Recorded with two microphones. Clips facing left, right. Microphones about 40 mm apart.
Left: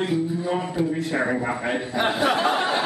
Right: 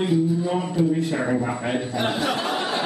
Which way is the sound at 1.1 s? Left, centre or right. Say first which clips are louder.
Even; centre.